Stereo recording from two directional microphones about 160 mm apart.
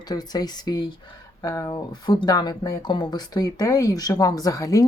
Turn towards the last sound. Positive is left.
turn(degrees=20)  # may be behind; listen again after turning